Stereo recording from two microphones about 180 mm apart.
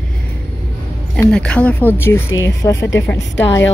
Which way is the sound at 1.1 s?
5° left (ahead or behind).